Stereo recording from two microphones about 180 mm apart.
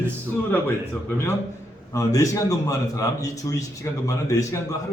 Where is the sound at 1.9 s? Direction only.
20° left (ahead or behind).